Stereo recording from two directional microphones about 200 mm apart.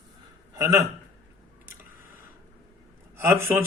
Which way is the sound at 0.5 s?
15° right (ahead or behind).